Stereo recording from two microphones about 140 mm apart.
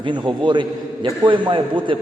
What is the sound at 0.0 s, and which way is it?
A man's voice, 35° right (ahead or behind).